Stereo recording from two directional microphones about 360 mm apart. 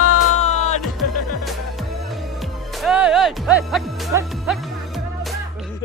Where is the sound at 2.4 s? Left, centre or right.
Centre.